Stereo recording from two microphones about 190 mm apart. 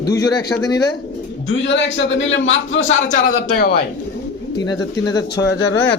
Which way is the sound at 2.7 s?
90° left.